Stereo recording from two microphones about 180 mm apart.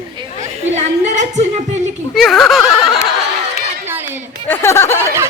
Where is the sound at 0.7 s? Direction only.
40° right (ahead or behind).